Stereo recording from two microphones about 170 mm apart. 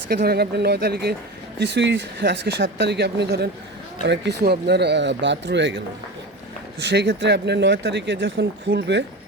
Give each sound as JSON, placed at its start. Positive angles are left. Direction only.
{"t": 0.1, "sound": "speech", "side_deg": -70}
{"t": 1.5, "sound": "speech", "side_deg": -90}
{"t": 4.0, "sound": "speech", "side_deg": -85}
{"t": 6.8, "sound": "speech", "side_deg": -85}